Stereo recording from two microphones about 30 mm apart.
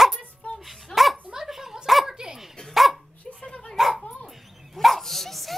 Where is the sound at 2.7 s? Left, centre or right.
Centre.